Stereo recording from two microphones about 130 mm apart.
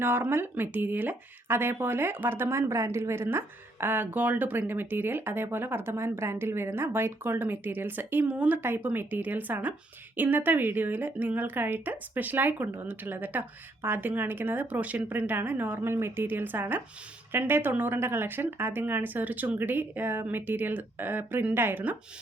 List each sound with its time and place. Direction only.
0.0 s speech: 15° right (ahead or behind)